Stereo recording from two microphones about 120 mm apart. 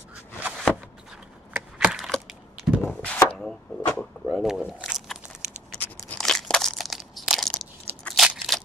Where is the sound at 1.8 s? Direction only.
10° right (ahead or behind).